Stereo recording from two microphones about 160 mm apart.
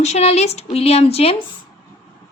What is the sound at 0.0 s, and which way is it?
A woman's voice, 45° left (ahead or behind).